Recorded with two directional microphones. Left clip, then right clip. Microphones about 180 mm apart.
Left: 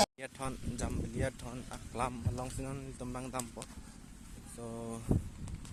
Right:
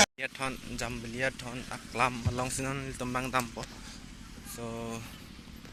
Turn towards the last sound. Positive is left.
turn(degrees=10)  # may be behind; listen again after turning